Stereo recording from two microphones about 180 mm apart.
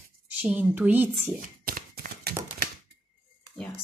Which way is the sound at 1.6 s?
55° right (ahead or behind).